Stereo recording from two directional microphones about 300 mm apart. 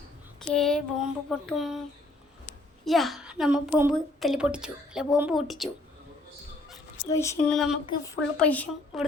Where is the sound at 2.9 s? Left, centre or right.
Centre.